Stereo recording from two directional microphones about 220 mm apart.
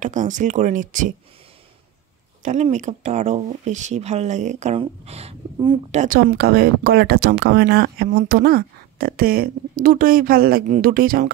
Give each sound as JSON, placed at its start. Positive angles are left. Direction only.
{"t": 0.0, "sound": "speech", "side_deg": -35}
{"t": 2.4, "sound": "speech", "side_deg": -30}
{"t": 5.9, "sound": "speech", "side_deg": -40}